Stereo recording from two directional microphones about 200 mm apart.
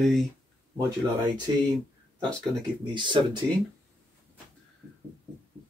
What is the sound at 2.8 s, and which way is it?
Speech, 25° right (ahead or behind).